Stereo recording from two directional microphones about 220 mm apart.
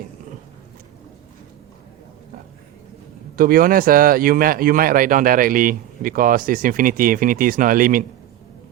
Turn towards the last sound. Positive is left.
turn(degrees=-40)  # may be behind; listen again after turning